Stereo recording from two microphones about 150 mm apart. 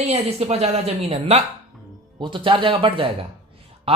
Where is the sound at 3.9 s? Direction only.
40° right (ahead or behind).